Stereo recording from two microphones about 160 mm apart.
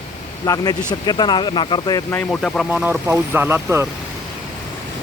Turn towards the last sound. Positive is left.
turn(degrees=-15)  # may be behind; listen again after turning